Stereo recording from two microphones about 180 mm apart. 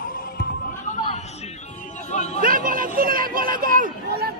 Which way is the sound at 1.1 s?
35° left (ahead or behind).